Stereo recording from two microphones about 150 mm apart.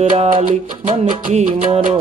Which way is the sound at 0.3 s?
55° right (ahead or behind).